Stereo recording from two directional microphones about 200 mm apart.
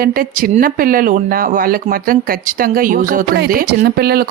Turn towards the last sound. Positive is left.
turn(degrees=-50)  # may be behind; listen again after turning